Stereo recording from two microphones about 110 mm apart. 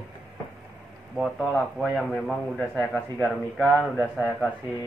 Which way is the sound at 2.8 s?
15° left (ahead or behind).